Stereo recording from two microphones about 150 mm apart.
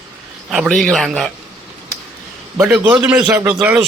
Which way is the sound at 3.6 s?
10° right (ahead or behind).